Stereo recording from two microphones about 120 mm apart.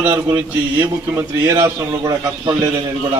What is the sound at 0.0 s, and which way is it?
A man's voice, 20° right (ahead or behind).